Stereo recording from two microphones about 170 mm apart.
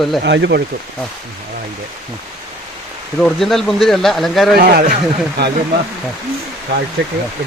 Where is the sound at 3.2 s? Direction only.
Centre (ahead or behind).